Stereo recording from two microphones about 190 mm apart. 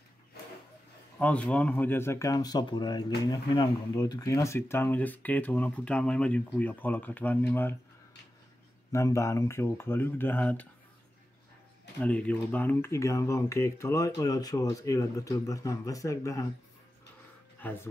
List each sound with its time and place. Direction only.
1.1 s speech: 5° left (ahead or behind)
8.9 s speech: 15° left (ahead or behind)
12.0 s speech: 5° left (ahead or behind)
17.6 s speech: 10° left (ahead or behind)